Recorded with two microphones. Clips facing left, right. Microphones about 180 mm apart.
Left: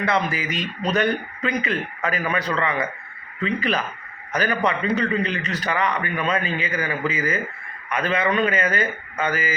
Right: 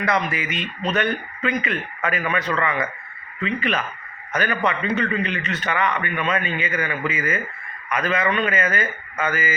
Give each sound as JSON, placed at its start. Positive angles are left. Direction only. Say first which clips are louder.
{"t": 0.0, "sound": "a man's voice", "louder": "even", "side_deg": 30}